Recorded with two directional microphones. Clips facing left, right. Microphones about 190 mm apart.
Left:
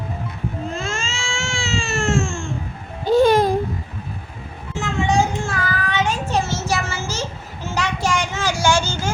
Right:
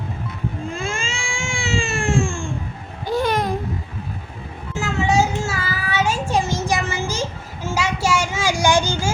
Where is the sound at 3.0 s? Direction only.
25° left (ahead or behind).